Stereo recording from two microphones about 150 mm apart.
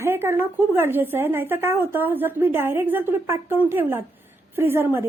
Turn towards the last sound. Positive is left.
turn(degrees=-15)  # may be behind; listen again after turning